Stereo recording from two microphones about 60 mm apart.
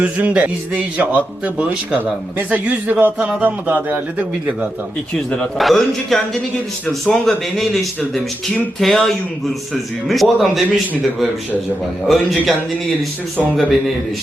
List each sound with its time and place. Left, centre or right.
0.0 s a man's voice: right
5.1 s speech: centre
5.5 s speech: centre
12.0 s speech: centre
13.6 s speech: centre